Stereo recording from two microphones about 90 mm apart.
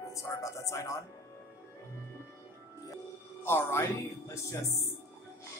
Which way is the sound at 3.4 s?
25° left (ahead or behind).